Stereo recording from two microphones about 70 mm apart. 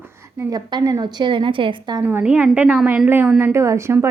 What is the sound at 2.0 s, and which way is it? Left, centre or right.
Speech, right.